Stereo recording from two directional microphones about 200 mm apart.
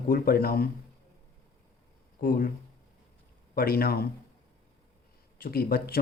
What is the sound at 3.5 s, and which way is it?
Speech, 50° left (ahead or behind).